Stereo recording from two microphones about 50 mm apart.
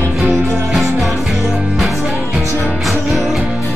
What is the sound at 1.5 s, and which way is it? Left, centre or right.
Music, right.